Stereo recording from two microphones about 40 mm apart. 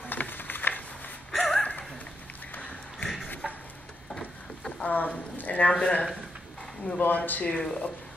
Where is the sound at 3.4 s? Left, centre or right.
Centre.